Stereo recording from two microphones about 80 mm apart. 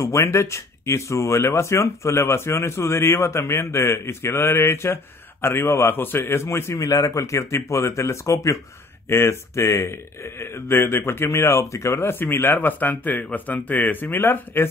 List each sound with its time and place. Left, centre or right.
0.0 s speech: left